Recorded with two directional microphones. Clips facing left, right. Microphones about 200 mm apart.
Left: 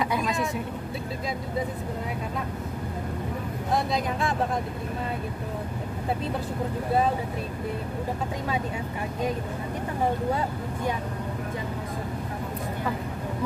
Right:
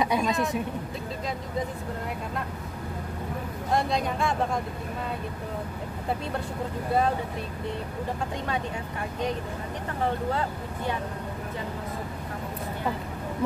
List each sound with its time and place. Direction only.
0.3 s speech: centre (ahead or behind)
3.7 s speech: centre (ahead or behind)